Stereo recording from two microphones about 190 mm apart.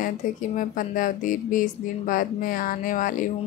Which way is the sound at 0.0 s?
45° left (ahead or behind).